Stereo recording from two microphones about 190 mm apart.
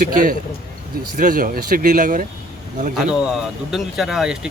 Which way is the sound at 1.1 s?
45° right (ahead or behind).